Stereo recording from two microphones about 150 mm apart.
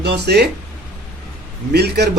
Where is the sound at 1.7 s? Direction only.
90° right.